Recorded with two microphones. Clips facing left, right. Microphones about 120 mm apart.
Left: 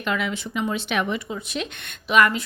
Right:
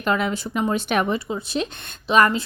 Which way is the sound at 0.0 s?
40° right (ahead or behind).